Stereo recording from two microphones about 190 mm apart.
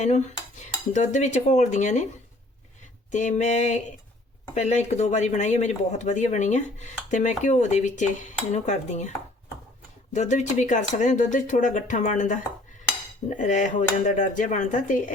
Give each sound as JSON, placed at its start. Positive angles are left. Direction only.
{"t": 0.0, "sound": "cutlery", "side_deg": 40}
{"t": 3.1, "sound": "speech", "side_deg": 40}